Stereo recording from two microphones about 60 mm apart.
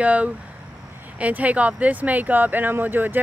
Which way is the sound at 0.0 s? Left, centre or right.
Right.